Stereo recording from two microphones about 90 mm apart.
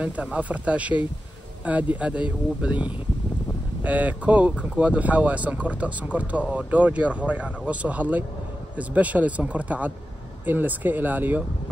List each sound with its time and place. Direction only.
0.0 s speech: 15° right (ahead or behind)